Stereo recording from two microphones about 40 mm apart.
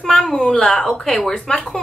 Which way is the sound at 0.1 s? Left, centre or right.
Centre.